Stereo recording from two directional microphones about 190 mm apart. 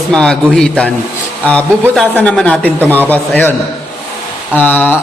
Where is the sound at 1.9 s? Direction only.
5° left (ahead or behind).